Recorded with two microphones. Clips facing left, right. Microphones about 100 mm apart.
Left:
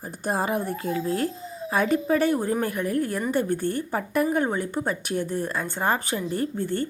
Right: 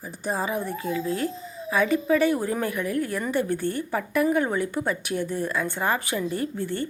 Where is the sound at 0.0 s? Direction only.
55° left (ahead or behind).